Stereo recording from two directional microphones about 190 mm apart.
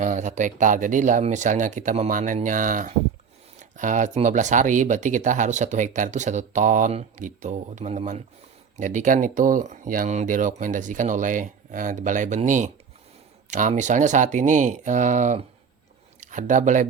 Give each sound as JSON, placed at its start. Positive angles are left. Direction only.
{"t": 0.0, "sound": "speech", "side_deg": -40}